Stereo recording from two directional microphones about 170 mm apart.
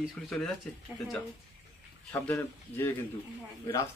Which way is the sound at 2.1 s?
15° left (ahead or behind).